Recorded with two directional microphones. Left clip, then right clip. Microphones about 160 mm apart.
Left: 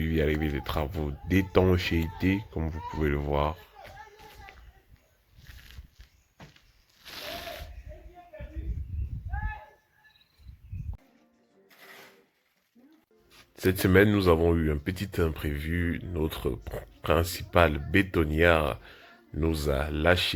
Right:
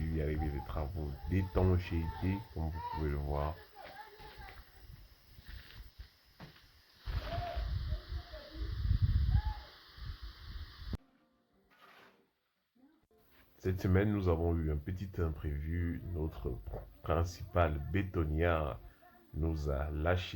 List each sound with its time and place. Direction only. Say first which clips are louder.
0.0 s speech: left 11 dB; 35° left (ahead or behind)
13.6 s speech: left 13 dB; 30° left (ahead or behind)